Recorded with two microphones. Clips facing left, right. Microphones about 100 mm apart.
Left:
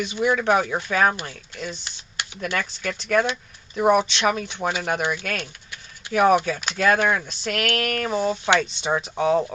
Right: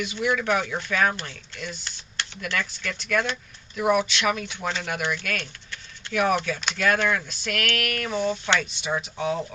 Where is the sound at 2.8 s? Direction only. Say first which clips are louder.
Left 6 dB; 40° left (ahead or behind).